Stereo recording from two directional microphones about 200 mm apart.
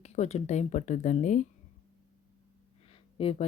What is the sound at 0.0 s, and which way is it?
Speech, 35° left (ahead or behind).